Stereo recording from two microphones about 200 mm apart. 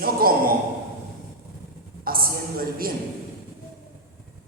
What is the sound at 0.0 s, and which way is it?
Speech, 45° right (ahead or behind).